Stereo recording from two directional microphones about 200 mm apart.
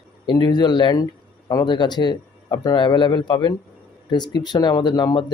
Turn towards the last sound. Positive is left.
turn(degrees=20)  # may be behind; listen again after turning